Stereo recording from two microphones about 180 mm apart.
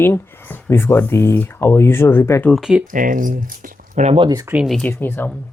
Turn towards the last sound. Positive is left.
turn(degrees=10)  # may be behind; listen again after turning